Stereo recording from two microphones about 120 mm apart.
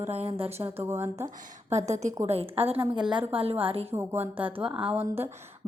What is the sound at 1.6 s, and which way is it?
Speech, 65° right (ahead or behind).